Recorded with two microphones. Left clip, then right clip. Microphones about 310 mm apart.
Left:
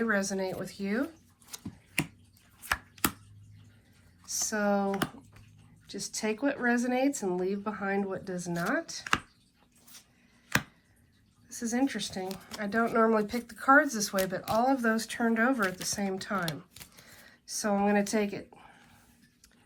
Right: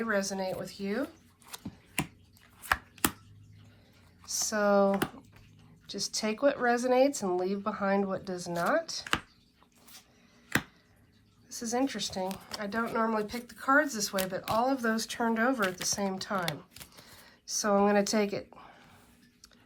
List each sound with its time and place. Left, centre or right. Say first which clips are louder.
0.0 s speech: left 1 dB; centre
4.2 s speech: right 2 dB; centre
5.9 s speech: right 1 dB; centre
11.4 s speech: even; centre
16.7 s a sound: right 1 dB; centre